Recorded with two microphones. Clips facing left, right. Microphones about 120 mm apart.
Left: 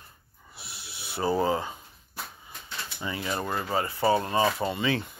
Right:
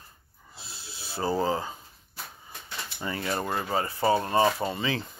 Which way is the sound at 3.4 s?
25° right (ahead or behind).